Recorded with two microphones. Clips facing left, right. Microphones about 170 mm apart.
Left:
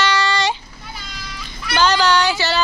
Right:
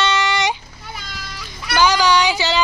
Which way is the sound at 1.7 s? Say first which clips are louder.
Right 1 dB; 10° right (ahead or behind).